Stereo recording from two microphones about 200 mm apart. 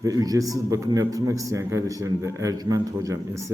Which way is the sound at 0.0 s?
20° right (ahead or behind).